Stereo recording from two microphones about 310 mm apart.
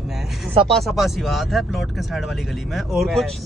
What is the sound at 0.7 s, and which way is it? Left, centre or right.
Speech, centre.